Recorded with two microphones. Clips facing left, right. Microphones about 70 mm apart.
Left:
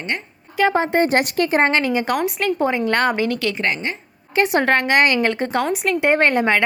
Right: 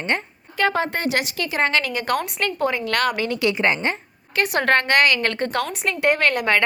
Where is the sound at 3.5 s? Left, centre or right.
Centre.